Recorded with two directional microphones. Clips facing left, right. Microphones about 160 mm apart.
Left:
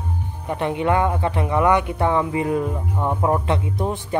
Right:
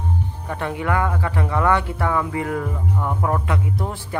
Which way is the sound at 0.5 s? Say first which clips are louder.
Left 4 dB; 20° left (ahead or behind).